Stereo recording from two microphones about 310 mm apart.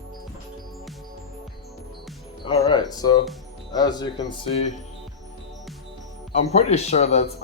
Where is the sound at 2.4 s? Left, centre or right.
Centre.